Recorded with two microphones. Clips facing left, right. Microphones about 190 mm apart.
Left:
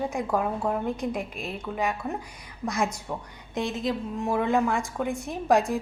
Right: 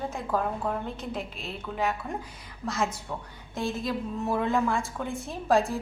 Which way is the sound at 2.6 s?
15° left (ahead or behind).